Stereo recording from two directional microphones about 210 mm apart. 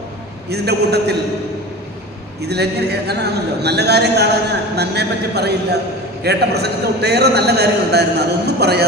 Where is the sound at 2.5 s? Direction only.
50° right (ahead or behind).